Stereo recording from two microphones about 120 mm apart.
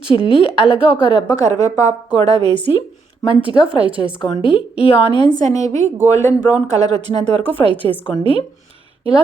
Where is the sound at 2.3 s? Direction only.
40° left (ahead or behind).